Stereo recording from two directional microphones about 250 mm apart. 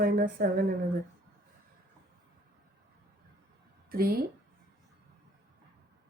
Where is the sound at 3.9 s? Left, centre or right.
Right.